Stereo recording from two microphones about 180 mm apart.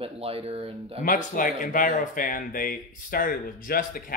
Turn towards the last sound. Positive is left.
turn(degrees=50)  # may be behind; listen again after turning